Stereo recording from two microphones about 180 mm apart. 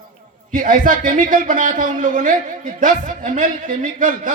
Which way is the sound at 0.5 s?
45° right (ahead or behind).